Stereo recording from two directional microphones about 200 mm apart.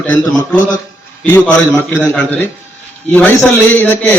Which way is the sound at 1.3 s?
5° left (ahead or behind).